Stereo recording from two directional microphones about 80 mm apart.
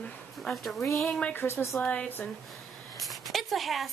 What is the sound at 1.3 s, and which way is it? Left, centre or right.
Speech, left.